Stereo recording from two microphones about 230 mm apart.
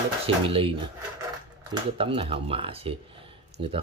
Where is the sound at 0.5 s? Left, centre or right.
Right.